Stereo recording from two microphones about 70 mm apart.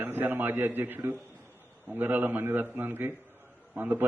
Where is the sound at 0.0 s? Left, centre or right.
Right.